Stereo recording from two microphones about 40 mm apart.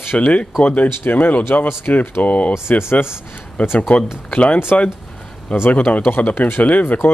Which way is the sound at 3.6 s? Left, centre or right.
Left.